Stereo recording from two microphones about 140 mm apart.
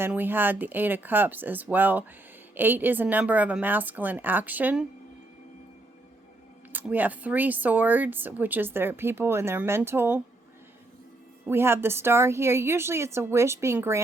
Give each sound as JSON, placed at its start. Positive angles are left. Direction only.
{"t": 0.0, "sound": "speech", "side_deg": -15}
{"t": 6.7, "sound": "speech", "side_deg": -10}
{"t": 11.4, "sound": "a woman's voice", "side_deg": -15}